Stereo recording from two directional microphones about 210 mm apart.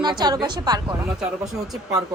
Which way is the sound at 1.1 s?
Centre (ahead or behind).